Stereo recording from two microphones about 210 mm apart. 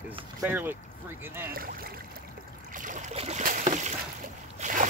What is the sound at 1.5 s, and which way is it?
Speech, 45° right (ahead or behind).